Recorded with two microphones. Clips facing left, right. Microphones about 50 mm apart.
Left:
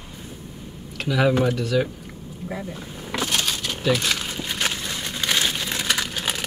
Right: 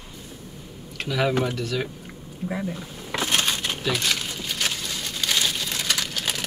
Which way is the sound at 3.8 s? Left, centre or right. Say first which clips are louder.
Left 5 dB; centre.